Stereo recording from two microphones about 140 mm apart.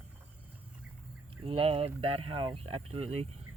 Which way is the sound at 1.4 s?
45° right (ahead or behind).